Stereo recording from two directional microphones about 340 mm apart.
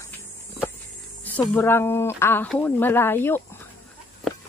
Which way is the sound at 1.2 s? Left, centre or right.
Centre.